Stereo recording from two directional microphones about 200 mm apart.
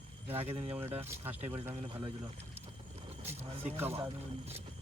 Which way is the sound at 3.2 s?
35° right (ahead or behind).